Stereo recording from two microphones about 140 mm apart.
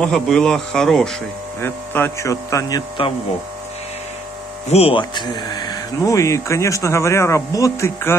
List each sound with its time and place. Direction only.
0.0 s speech: 5° left (ahead or behind)
1.6 s speech: 15° left (ahead or behind)
4.6 s speech: 45° left (ahead or behind); by 8.2 s 20° left (ahead or behind)